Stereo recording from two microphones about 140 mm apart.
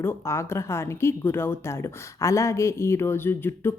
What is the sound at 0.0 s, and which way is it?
Speech, 20° left (ahead or behind).